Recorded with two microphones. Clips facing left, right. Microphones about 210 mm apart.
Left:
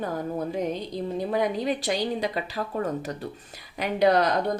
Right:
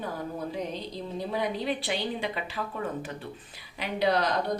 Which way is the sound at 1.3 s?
45° left (ahead or behind).